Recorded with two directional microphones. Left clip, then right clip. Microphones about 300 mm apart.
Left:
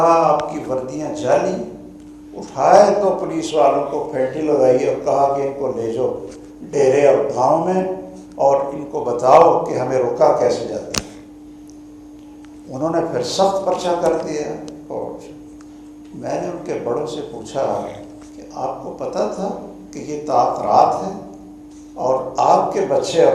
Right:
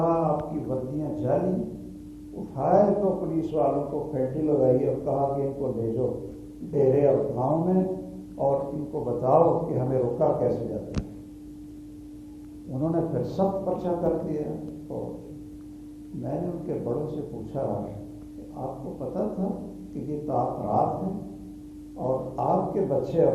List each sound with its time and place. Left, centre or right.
0.0 s a man's voice: centre
12.7 s a man's voice: centre
13.5 s a man's voice: centre
13.7 s a man's voice: centre
14.8 s speech: centre
16.2 s a man's voice: centre